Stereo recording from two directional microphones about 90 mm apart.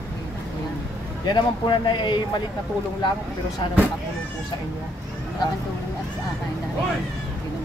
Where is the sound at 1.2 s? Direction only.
60° left (ahead or behind).